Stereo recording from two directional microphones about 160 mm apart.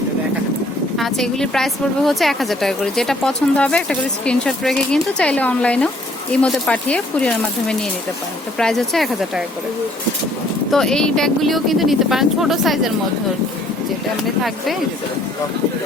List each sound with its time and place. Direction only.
0.9 s a woman's voice: centre (ahead or behind)
10.7 s a woman's voice: 5° left (ahead or behind)